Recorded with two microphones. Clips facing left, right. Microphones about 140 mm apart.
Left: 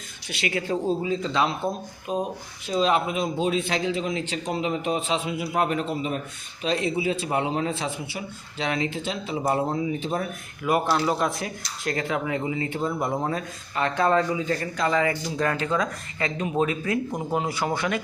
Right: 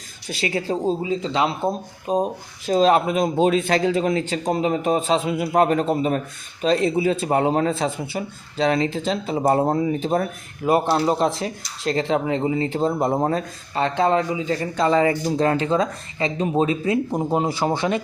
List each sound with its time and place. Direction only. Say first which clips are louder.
0.3 s a man's voice: right 3 dB; 35° right (ahead or behind)
10.7 s speech: right 4 dB; 30° right (ahead or behind)